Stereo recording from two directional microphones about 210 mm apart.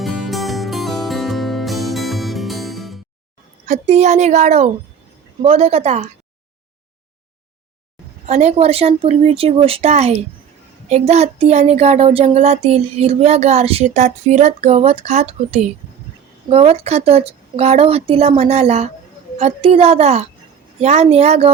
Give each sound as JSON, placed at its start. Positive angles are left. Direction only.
{"t": 0.0, "sound": "music", "side_deg": 0}
{"t": 3.7, "sound": "a woman's voice", "side_deg": -35}
{"t": 8.3, "sound": "a woman's voice", "side_deg": -30}